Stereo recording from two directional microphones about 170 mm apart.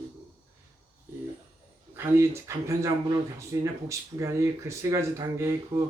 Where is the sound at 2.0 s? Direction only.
15° right (ahead or behind).